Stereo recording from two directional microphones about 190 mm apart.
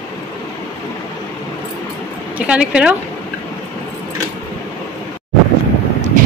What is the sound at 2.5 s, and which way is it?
Speech, 5° right (ahead or behind).